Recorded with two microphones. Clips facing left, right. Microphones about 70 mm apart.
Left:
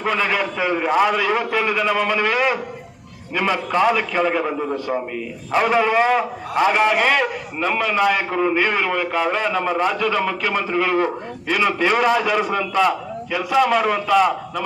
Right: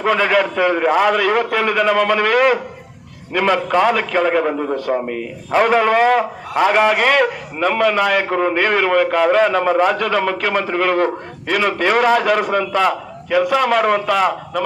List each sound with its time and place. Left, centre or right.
0.0 s a man's voice: right